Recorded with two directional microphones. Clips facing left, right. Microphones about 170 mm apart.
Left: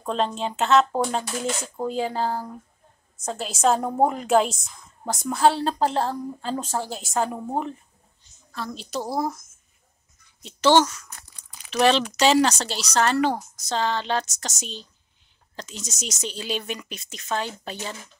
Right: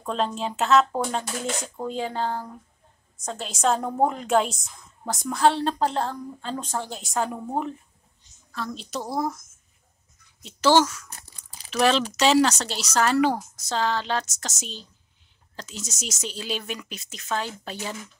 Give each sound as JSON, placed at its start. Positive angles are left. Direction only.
{"t": 0.0, "sound": "speech", "side_deg": 0}
{"t": 8.5, "sound": "speech", "side_deg": 0}
{"t": 11.1, "sound": "crunch", "side_deg": -30}
{"t": 11.7, "sound": "speech", "side_deg": 0}